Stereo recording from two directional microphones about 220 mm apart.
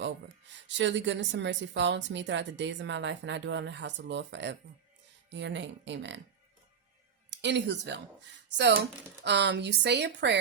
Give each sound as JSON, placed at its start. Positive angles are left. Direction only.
{"t": 0.7, "sound": "a woman's voice", "side_deg": -55}
{"t": 7.3, "sound": "speech", "side_deg": -55}